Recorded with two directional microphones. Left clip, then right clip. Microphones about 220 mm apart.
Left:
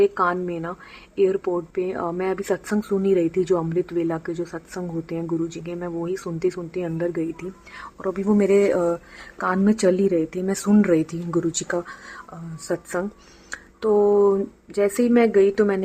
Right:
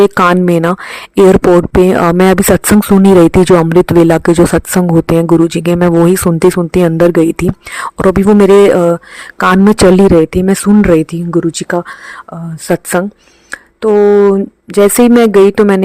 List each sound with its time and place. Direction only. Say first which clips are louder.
0.0 s a woman's voice: right 12 dB; 50° right (ahead or behind)
13.5 s speech: right 11 dB; 35° right (ahead or behind)